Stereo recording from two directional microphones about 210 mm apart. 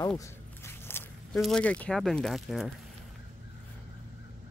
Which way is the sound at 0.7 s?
10° left (ahead or behind).